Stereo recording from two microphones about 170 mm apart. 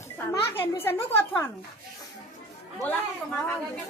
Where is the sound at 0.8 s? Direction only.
15° left (ahead or behind).